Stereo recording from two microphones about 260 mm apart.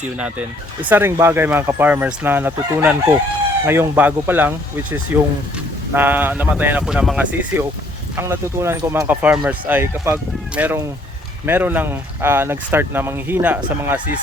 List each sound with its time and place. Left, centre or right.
0.9 s speech: centre